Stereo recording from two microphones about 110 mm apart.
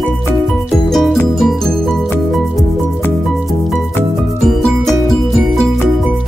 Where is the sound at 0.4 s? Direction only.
Centre (ahead or behind).